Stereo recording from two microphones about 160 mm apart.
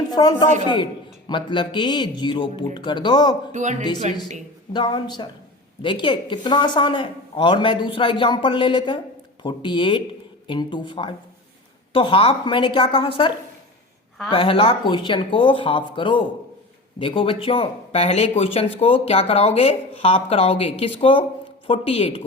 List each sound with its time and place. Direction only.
0.1 s speech: 25° left (ahead or behind)
3.5 s speech: 50° right (ahead or behind)
4.7 s speech: 30° left (ahead or behind)